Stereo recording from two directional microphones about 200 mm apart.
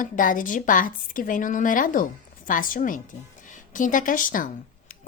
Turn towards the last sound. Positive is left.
turn(degrees=45)  # may be behind; listen again after turning